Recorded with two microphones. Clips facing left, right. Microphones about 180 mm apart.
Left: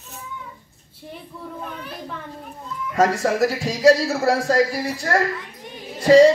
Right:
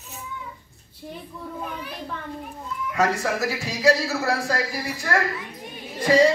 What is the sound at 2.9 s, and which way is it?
A man's voice, 30° left (ahead or behind).